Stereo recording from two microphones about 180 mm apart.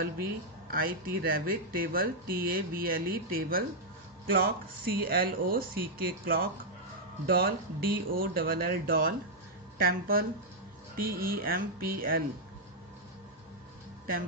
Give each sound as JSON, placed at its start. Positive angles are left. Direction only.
{"t": 0.0, "sound": "speech", "side_deg": -55}